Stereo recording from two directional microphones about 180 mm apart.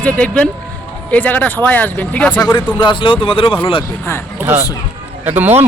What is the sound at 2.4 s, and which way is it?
Speech, 20° left (ahead or behind).